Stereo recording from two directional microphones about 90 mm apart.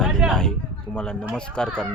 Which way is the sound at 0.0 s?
5° left (ahead or behind).